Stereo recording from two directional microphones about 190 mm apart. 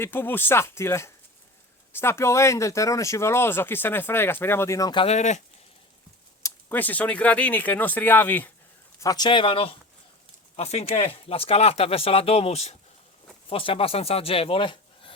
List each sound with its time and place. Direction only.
0.0 s speech: 10° left (ahead or behind)
5.0 s speech: 35° left (ahead or behind)
6.4 s speech: 10° left (ahead or behind); by 15.1 s 25° left (ahead or behind)